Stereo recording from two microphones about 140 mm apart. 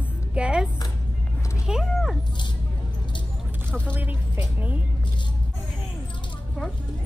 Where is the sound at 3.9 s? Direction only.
10° right (ahead or behind).